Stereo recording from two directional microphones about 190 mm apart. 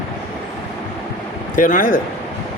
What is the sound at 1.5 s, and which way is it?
Speech, 45° left (ahead or behind).